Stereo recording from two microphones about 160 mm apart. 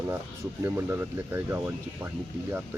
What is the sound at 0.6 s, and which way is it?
Speech, 15° right (ahead or behind).